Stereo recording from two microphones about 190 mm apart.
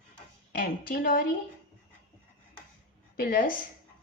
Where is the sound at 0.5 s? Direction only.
50° left (ahead or behind).